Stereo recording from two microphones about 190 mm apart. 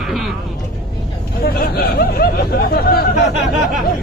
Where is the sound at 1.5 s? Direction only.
55° left (ahead or behind).